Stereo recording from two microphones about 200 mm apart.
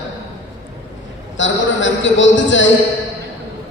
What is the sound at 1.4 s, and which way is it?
A man's voice, 70° left (ahead or behind).